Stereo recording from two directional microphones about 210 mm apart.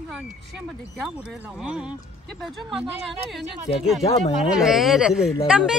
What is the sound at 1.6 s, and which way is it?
Speech, 5° right (ahead or behind).